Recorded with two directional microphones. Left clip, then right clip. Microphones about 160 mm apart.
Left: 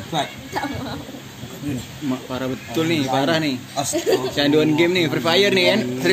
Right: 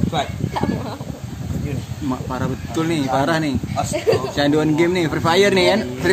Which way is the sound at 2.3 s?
30° right (ahead or behind).